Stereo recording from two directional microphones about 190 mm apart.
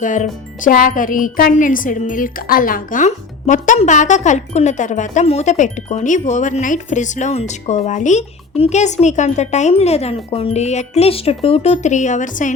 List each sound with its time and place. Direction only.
0.0 s speech: 40° left (ahead or behind)